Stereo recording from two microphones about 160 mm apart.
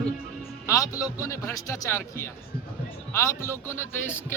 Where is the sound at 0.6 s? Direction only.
20° left (ahead or behind).